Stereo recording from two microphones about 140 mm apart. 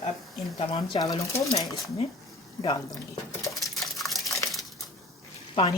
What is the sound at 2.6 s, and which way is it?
Speech, 30° left (ahead or behind).